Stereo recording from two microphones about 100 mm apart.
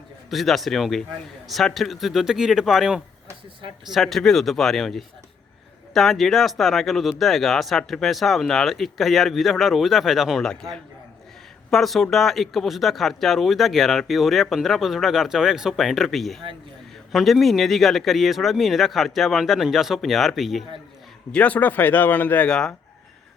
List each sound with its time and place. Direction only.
0.3 s speech: centre (ahead or behind)
21.3 s speech: 15° left (ahead or behind)